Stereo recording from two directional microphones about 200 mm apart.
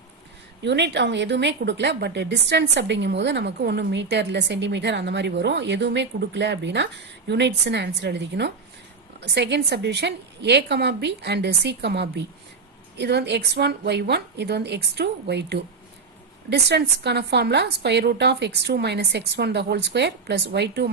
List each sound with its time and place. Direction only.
0.7 s speech: 60° right (ahead or behind)